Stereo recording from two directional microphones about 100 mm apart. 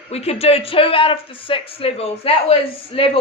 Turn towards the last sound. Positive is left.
turn(degrees=70)  # may be behind; listen again after turning